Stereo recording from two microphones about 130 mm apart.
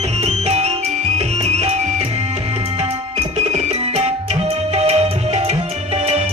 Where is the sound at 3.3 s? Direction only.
55° right (ahead or behind).